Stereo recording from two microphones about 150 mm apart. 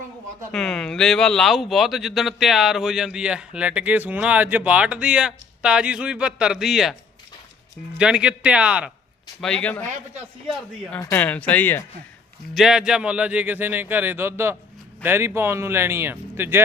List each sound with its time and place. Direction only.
0.5 s speech: 5° left (ahead or behind)
7.9 s speech: 5° right (ahead or behind)
9.4 s speech: 5° left (ahead or behind)
11.1 s speech: 10° left (ahead or behind)
12.5 s speech: 5° right (ahead or behind)